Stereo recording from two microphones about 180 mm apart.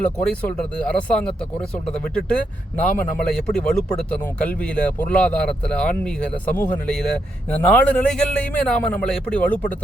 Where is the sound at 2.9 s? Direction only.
50° left (ahead or behind).